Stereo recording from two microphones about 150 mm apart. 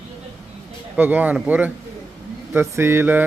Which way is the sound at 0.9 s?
10° right (ahead or behind).